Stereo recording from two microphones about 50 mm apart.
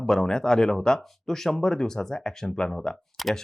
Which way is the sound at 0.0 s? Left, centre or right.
Centre.